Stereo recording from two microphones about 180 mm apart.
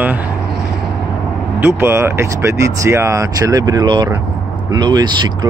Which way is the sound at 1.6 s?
15° right (ahead or behind).